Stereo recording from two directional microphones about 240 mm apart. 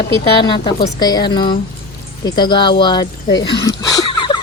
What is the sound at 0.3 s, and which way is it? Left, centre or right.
A woman's voice, centre.